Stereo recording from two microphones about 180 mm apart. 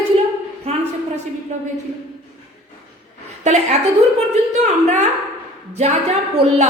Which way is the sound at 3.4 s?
40° right (ahead or behind).